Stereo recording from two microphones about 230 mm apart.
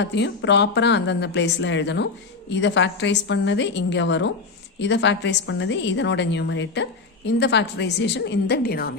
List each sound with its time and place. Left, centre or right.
0.0 s a woman's voice: left